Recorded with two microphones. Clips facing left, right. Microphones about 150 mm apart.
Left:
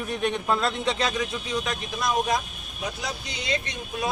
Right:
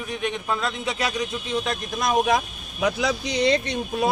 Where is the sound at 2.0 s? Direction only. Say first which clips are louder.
Right 4 dB; 60° right (ahead or behind); by 3.4 s 90° right.